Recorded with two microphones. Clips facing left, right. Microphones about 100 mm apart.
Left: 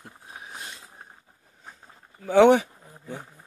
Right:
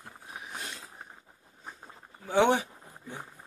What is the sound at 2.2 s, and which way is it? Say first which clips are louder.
Speech: left 8 dB; 90° left.